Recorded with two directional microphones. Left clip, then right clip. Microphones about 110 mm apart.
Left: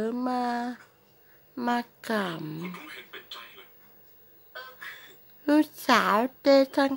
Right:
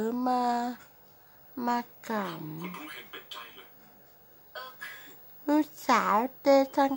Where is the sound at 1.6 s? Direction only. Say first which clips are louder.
Left 2 dB; 20° left (ahead or behind).